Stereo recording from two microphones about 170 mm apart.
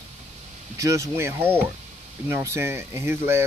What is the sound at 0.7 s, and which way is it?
Speech, 20° right (ahead or behind).